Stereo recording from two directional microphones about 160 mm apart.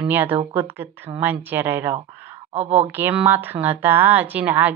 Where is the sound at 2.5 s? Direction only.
40° right (ahead or behind).